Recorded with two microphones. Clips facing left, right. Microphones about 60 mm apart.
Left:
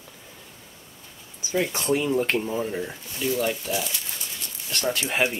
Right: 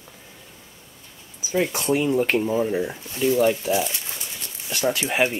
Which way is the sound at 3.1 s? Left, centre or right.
Right.